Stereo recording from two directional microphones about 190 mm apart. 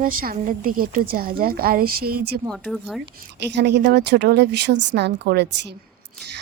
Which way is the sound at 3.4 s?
60° right (ahead or behind).